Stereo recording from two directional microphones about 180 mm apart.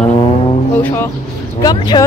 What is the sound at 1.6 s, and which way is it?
Speech, 25° left (ahead or behind).